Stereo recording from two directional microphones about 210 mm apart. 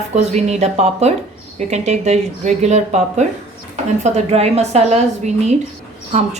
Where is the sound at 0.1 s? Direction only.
30° right (ahead or behind).